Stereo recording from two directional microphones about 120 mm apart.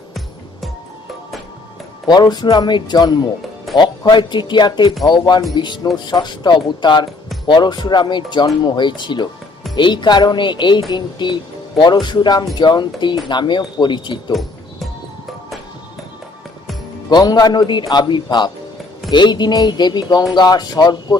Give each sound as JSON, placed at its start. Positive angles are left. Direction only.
{"t": 2.0, "sound": "speech", "side_deg": 35}
{"t": 3.7, "sound": "music", "side_deg": 0}
{"t": 4.1, "sound": "speech", "side_deg": 40}
{"t": 17.1, "sound": "speech", "side_deg": 35}